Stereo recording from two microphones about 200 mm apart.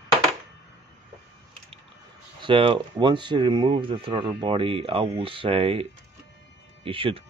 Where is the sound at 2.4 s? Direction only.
25° right (ahead or behind).